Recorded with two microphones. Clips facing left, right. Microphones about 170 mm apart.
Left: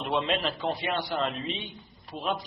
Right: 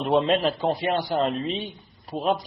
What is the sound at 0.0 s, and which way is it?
A man's voice, 40° right (ahead or behind).